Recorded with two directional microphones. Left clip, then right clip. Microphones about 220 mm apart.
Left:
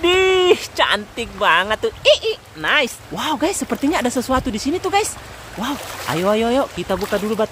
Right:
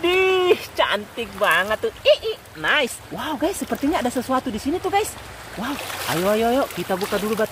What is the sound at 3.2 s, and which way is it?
Speech, 20° left (ahead or behind).